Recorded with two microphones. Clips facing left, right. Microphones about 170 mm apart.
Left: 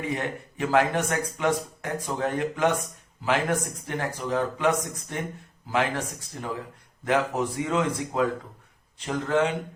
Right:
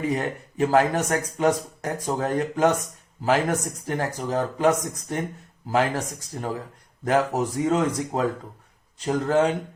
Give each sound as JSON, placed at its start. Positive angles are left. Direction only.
{"t": 0.5, "sound": "speech", "side_deg": -35}